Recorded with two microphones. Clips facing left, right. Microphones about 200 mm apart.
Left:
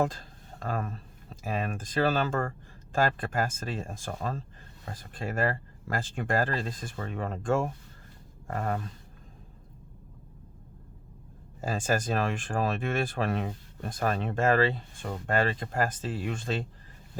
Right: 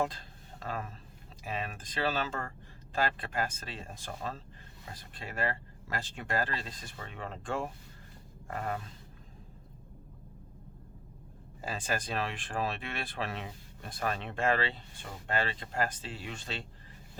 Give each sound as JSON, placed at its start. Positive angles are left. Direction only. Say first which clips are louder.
{"t": 0.0, "sound": "speech", "louder": "left 5 dB", "side_deg": 45}
{"t": 11.6, "sound": "speech", "louder": "left 7 dB", "side_deg": 45}